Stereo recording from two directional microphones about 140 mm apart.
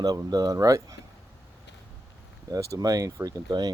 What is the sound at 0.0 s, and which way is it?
Speech, 30° right (ahead or behind).